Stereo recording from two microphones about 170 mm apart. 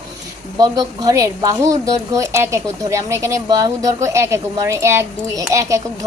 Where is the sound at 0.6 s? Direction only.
20° right (ahead or behind).